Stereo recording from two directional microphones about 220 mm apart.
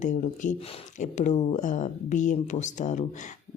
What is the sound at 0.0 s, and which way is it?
Speech, 35° left (ahead or behind).